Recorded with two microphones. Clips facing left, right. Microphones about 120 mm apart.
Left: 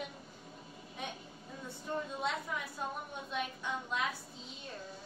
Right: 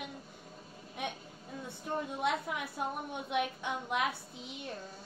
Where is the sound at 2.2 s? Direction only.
65° right (ahead or behind).